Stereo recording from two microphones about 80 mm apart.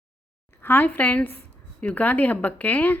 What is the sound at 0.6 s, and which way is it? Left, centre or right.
A woman's voice, left.